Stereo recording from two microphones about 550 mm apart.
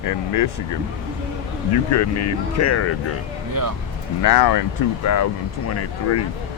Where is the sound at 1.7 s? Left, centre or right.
Left.